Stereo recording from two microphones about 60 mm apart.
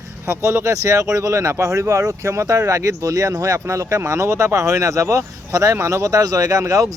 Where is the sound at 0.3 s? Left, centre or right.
Right.